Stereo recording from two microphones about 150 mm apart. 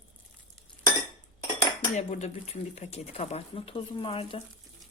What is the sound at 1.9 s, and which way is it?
Speech, 50° left (ahead or behind).